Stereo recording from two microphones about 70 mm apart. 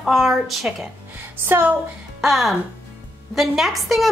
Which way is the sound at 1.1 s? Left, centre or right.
Right.